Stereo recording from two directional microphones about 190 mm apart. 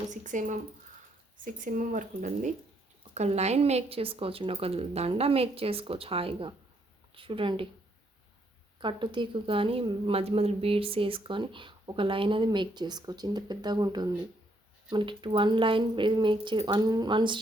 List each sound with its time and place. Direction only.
0.1 s a woman's voice: 40° right (ahead or behind)
8.8 s a woman's voice: 25° right (ahead or behind)